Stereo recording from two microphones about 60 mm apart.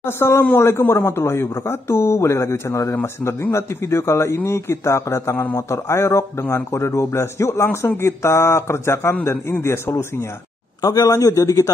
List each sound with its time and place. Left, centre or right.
0.0 s speech: left
10.8 s a man's voice: left